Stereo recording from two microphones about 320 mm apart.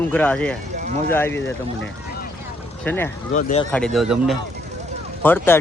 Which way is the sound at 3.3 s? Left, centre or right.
Left.